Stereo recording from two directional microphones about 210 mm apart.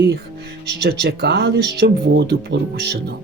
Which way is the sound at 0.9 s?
50° right (ahead or behind).